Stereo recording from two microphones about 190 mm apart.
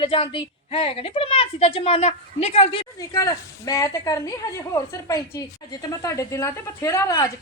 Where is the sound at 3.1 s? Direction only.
15° left (ahead or behind).